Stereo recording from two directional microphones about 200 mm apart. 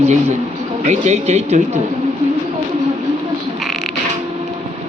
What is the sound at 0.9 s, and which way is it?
Speech, 35° right (ahead or behind).